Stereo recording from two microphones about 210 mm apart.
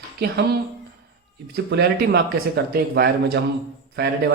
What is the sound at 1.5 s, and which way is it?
Speech, 50° right (ahead or behind).